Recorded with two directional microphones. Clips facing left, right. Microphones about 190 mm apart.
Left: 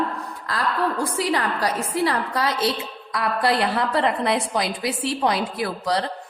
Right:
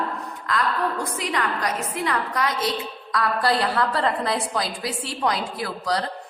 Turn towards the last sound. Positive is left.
turn(degrees=25)  # may be behind; listen again after turning